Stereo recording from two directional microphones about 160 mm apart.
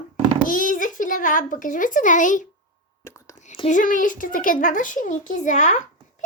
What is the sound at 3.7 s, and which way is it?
A child's voice, 55° left (ahead or behind).